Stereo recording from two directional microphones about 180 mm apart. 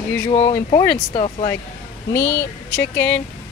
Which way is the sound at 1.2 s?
35° left (ahead or behind).